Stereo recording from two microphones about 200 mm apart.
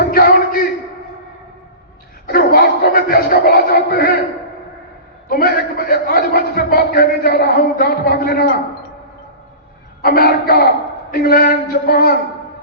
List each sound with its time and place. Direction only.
0.1 s a sound: 45° left (ahead or behind)
2.2 s music: 50° left (ahead or behind)
5.3 s a man's voice: 50° left (ahead or behind)
10.0 s a man's voice: 50° left (ahead or behind)